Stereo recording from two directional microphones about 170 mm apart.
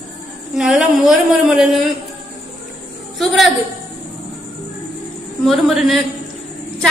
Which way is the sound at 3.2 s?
Centre (ahead or behind).